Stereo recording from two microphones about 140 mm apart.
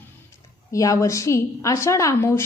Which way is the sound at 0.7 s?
25° left (ahead or behind).